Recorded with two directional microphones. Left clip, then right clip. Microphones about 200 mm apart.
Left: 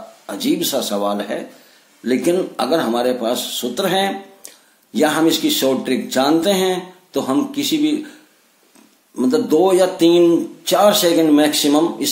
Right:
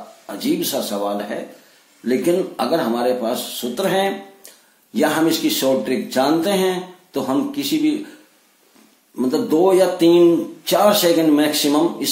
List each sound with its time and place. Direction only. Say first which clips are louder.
0.3 s speech: left 2 dB; 35° left (ahead or behind)
9.1 s speech: left 3 dB; 35° left (ahead or behind)